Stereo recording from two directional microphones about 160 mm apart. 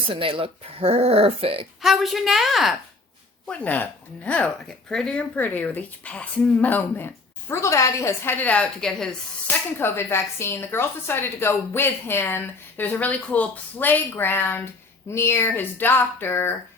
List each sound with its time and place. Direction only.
0.1 s speech: 35° right (ahead or behind)
1.8 s a woman's voice: centre (ahead or behind)
3.5 s speech: 10° left (ahead or behind)